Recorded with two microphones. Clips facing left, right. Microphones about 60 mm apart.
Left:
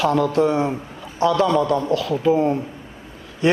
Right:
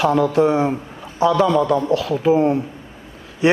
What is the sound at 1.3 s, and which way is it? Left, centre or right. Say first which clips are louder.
Speech: right 2 dB; centre.